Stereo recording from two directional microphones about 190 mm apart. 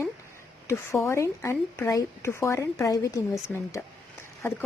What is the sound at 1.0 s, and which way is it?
A woman's voice, 15° left (ahead or behind).